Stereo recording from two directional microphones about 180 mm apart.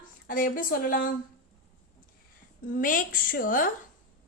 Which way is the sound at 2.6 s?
50° left (ahead or behind).